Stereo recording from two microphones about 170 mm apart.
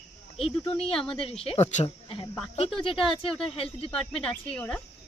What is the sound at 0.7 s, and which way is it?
Speech, 35° left (ahead or behind).